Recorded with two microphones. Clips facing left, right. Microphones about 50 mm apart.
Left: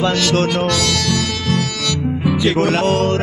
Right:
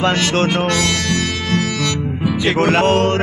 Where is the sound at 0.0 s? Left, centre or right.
Right.